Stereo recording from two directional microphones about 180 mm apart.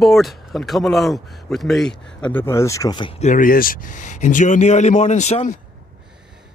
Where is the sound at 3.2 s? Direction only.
50° left (ahead or behind).